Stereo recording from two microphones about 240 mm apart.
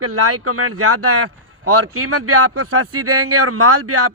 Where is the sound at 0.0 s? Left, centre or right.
Right.